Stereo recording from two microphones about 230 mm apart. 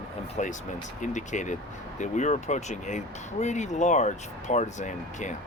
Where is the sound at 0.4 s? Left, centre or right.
Left.